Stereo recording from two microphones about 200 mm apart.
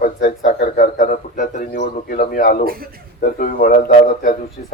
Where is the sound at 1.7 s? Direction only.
50° left (ahead or behind).